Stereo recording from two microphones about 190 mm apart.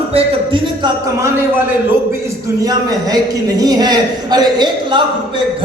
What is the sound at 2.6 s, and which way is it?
A man's voice, 20° right (ahead or behind).